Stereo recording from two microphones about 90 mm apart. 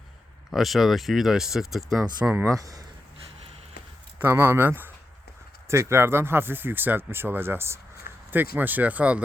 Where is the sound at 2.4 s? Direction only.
40° right (ahead or behind).